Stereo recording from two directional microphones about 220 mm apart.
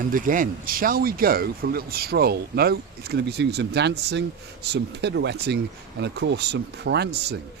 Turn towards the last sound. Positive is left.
turn(degrees=-50)  # may be behind; listen again after turning